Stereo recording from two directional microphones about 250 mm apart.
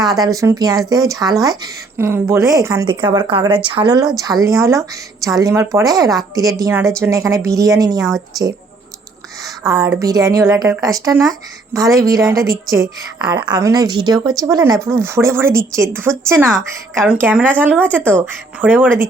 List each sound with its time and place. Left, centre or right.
0.0 s a woman's voice: centre
9.4 s a woman's voice: centre